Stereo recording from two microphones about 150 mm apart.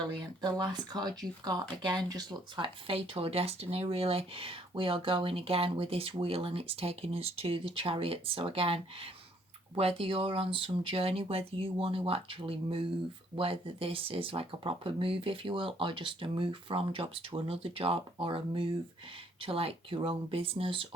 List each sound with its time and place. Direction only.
0.4 s speech: 30° right (ahead or behind)